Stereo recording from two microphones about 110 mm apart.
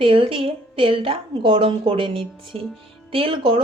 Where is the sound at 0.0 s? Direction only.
55° right (ahead or behind).